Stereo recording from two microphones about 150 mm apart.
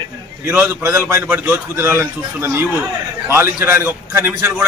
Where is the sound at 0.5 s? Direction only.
15° right (ahead or behind).